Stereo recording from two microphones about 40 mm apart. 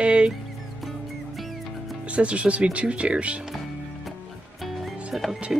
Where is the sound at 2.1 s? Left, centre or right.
Right.